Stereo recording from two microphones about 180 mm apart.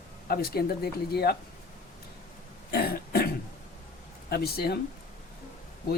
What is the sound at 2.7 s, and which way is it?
Throat clearing, 60° left (ahead or behind).